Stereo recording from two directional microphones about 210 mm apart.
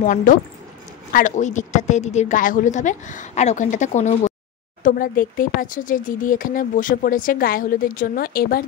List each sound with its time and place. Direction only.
0.0 s speech: 40° left (ahead or behind)